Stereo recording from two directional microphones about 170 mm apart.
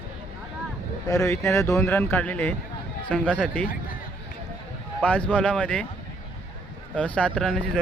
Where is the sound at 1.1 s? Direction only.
15° left (ahead or behind).